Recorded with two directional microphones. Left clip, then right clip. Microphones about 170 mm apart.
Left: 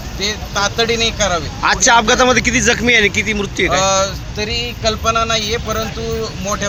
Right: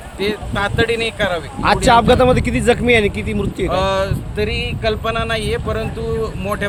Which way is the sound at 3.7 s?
35° right (ahead or behind).